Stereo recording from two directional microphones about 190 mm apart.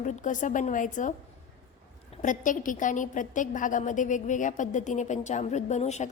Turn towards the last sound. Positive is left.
turn(degrees=35)  # may be behind; listen again after turning